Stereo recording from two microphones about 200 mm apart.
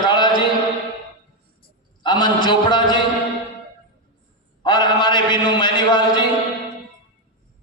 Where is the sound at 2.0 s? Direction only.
20° left (ahead or behind).